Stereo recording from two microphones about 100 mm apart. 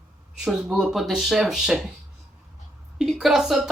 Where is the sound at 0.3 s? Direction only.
5° right (ahead or behind).